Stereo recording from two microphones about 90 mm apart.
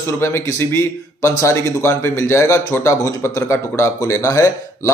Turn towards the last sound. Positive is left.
turn(degrees=35)  # may be behind; listen again after turning